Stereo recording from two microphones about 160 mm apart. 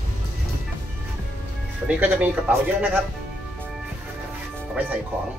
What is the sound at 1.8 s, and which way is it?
Speech, 10° right (ahead or behind).